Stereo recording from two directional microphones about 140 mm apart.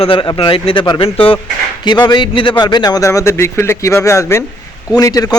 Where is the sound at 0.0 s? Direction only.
40° left (ahead or behind).